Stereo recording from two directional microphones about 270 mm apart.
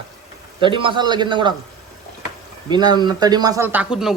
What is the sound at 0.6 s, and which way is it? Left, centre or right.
Speech, centre.